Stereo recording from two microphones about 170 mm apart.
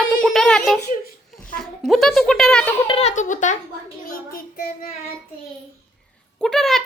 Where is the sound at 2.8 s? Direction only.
35° left (ahead or behind).